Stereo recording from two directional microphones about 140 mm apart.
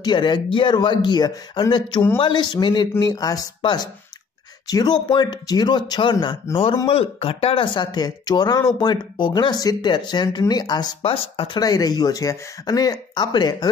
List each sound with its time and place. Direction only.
0.0 s speech: 35° left (ahead or behind)